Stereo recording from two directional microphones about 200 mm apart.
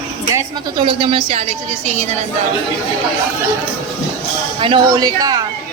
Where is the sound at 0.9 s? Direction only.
25° right (ahead or behind).